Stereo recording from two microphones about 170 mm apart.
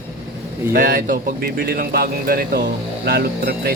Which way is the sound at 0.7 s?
55° right (ahead or behind).